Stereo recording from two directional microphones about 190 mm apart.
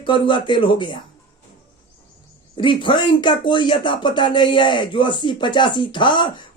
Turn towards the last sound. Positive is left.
turn(degrees=25)  # may be behind; listen again after turning